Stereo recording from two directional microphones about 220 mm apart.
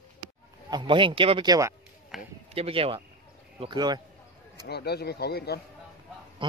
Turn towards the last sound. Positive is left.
turn(degrees=-20)  # may be behind; listen again after turning